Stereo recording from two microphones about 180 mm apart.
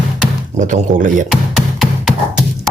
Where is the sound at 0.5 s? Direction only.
45° right (ahead or behind).